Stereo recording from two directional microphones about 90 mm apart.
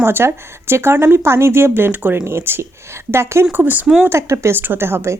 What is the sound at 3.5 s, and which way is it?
Speech, 20° right (ahead or behind).